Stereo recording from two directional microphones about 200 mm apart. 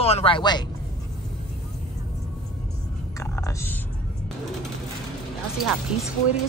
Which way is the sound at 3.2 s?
15° left (ahead or behind).